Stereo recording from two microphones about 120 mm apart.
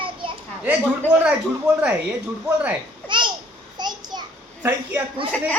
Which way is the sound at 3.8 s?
40° right (ahead or behind).